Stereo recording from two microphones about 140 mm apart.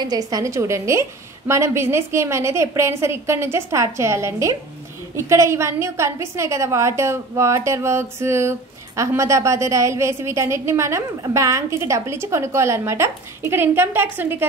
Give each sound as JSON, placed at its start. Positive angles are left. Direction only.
{"t": 0.0, "sound": "a woman's voice", "side_deg": -25}